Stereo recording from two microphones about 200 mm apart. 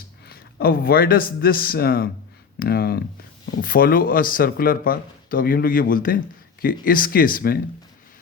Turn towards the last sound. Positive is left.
turn(degrees=45)  # may be behind; listen again after turning